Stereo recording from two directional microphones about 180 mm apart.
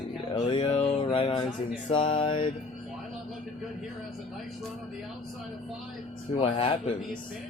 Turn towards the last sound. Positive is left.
turn(degrees=30)  # may be behind; listen again after turning